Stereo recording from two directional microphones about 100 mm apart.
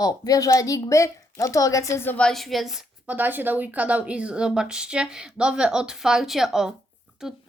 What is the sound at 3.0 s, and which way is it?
A child's voice, 15° right (ahead or behind).